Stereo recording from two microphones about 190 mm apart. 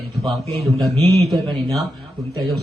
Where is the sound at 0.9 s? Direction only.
30° right (ahead or behind).